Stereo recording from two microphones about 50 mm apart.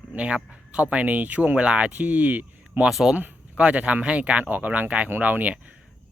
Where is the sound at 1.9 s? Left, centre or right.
Right.